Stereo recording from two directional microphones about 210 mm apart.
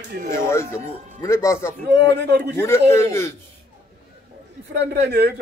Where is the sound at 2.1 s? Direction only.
55° right (ahead or behind).